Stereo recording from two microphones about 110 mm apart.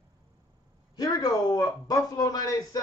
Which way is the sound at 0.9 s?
35° left (ahead or behind).